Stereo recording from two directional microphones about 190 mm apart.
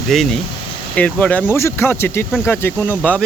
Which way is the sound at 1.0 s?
5° left (ahead or behind).